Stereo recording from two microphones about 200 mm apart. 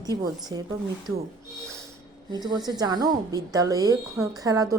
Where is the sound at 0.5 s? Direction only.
20° right (ahead or behind).